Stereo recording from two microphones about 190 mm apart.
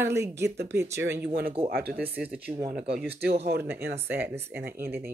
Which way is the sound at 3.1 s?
60° right (ahead or behind).